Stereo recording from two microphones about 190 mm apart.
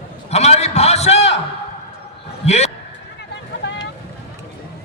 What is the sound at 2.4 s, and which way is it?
Speech, 35° left (ahead or behind).